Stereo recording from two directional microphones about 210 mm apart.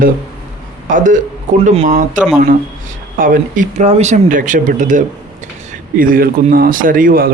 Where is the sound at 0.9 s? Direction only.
40° right (ahead or behind).